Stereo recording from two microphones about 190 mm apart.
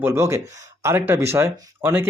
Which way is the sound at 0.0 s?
15° right (ahead or behind).